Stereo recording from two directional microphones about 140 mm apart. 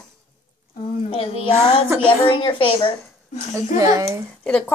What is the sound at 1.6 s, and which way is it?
Child singing, 15° right (ahead or behind).